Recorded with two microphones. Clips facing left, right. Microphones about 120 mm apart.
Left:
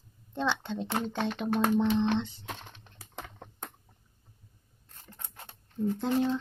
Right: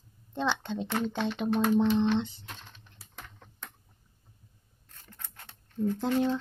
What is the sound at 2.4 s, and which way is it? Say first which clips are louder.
Crushing: left 5 dB; 60° left (ahead or behind).